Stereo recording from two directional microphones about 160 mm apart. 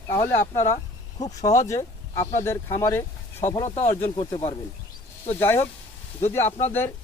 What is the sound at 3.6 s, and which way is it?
Speech, 40° left (ahead or behind).